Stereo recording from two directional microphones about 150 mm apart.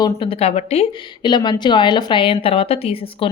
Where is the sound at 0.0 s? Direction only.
35° left (ahead or behind).